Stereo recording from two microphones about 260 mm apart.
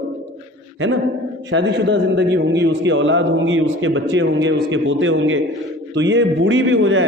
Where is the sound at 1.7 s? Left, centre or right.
Right.